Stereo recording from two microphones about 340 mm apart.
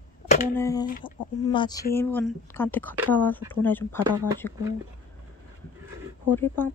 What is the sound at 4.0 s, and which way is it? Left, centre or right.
Speech, centre.